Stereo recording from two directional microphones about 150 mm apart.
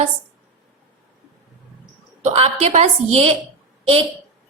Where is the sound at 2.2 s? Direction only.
45° right (ahead or behind).